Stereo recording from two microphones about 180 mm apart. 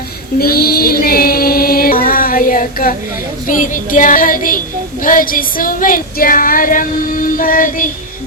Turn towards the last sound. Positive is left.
turn(degrees=50)  # may be behind; listen again after turning